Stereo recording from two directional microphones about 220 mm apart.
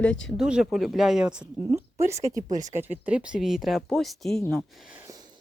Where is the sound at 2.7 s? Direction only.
10° right (ahead or behind).